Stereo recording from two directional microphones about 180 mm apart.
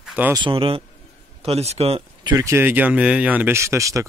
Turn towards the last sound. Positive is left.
turn(degrees=-15)  # may be behind; listen again after turning